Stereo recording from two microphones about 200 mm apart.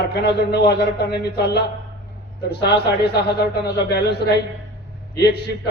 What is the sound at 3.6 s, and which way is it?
Speech, 55° left (ahead or behind).